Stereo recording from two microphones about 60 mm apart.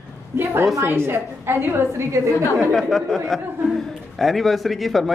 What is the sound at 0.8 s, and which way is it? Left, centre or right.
A woman's voice, right.